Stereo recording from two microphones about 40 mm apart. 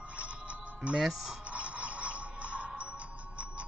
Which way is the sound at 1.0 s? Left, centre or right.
Centre.